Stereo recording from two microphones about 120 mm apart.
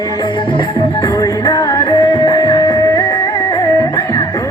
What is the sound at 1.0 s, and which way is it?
Music, 30° left (ahead or behind).